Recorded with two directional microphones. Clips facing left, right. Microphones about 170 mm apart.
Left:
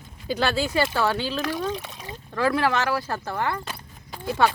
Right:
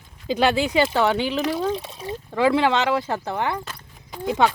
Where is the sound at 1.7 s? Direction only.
30° right (ahead or behind).